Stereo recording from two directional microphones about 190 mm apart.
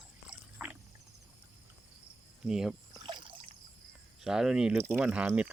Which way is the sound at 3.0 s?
25° right (ahead or behind).